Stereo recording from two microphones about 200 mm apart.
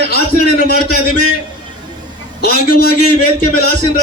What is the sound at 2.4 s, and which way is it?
Speech, 50° left (ahead or behind).